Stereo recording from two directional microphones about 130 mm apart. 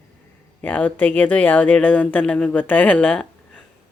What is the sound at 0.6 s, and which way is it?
Speech, 10° left (ahead or behind).